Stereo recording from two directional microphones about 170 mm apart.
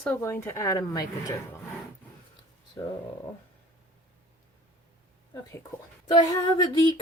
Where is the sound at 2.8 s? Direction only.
15° left (ahead or behind).